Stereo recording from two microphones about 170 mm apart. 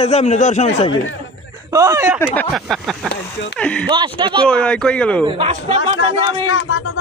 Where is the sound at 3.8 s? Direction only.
30° right (ahead or behind).